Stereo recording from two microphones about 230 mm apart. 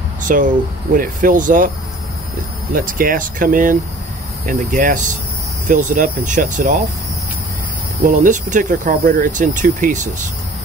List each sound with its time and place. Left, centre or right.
0.2 s speech: right
2.7 s speech: right
8.1 s speech: right